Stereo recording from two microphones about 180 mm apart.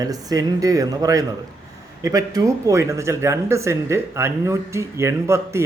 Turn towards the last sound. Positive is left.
turn(degrees=-15)  # may be behind; listen again after turning